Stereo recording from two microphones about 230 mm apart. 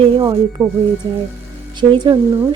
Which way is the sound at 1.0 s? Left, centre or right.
Centre.